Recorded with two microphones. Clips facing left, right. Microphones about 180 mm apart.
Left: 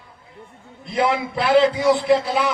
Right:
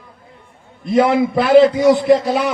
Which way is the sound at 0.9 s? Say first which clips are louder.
Right 7 dB; 45° right (ahead or behind).